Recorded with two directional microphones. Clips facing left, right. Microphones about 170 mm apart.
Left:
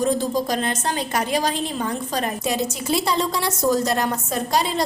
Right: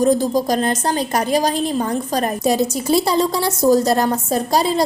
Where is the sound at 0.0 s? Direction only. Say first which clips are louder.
Right 5 dB; 40° right (ahead or behind).